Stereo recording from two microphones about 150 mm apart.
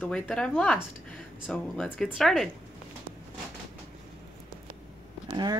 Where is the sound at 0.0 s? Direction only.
5° left (ahead or behind).